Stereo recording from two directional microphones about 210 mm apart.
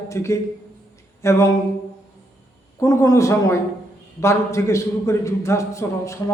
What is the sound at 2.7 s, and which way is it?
A man's voice, 15° left (ahead or behind).